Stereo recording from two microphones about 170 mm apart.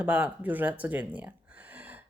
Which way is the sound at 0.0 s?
10° right (ahead or behind).